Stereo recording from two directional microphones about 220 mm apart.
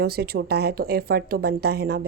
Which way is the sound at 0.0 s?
45° right (ahead or behind).